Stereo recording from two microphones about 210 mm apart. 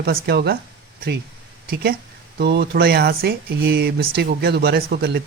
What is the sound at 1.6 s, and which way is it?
Speech, 45° right (ahead or behind).